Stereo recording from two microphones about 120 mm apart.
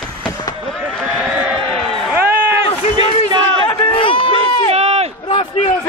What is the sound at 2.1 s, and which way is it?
Run, 15° right (ahead or behind).